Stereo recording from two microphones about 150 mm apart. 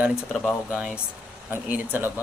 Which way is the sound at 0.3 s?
5° right (ahead or behind).